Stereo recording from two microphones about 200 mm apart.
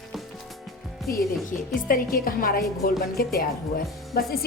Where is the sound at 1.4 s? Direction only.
45° left (ahead or behind).